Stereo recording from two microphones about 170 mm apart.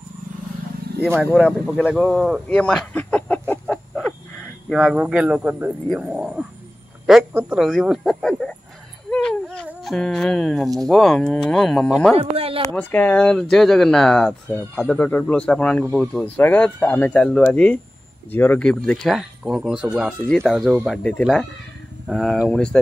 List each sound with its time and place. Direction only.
1.3 s speech: centre (ahead or behind)
7.5 s speech: centre (ahead or behind)
9.1 s a sound: 5° left (ahead or behind)
9.8 s speech: 5° left (ahead or behind)
12.2 s speech: 35° right (ahead or behind)
12.7 s speech: 10° left (ahead or behind)